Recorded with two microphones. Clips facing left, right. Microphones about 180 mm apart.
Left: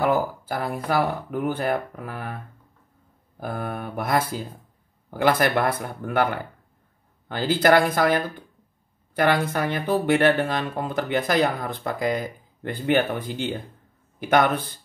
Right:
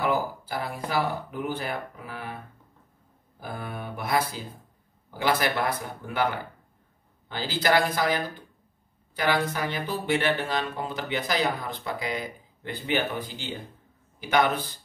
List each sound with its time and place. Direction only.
0.0 s speech: 50° left (ahead or behind)
3.3 s speech: 55° left (ahead or behind)
7.2 s speech: 55° left (ahead or behind)